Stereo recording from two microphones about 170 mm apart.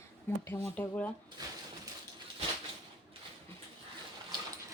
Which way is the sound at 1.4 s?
20° right (ahead or behind).